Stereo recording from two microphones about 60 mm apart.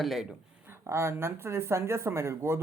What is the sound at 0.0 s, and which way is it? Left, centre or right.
Speech, centre.